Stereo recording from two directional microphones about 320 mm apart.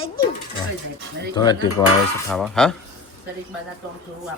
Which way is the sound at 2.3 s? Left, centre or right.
Centre.